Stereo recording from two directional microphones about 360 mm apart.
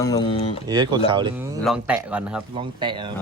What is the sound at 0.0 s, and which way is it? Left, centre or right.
Speech, centre.